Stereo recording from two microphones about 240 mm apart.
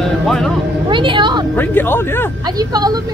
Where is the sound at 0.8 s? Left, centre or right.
Centre.